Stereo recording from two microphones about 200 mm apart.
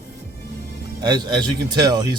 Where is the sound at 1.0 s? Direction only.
20° right (ahead or behind).